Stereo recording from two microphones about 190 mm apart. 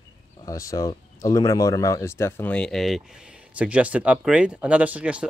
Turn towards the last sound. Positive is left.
turn(degrees=-5)  # may be behind; listen again after turning